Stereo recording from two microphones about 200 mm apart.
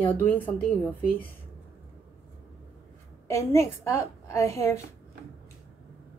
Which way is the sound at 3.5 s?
15° left (ahead or behind).